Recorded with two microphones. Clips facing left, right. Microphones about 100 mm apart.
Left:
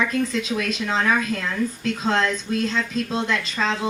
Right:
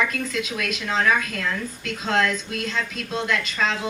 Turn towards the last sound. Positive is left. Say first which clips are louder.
# even
turn(degrees=30)  # may be behind; listen again after turning